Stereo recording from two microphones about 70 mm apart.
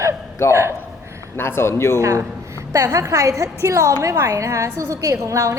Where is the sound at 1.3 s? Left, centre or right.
Left.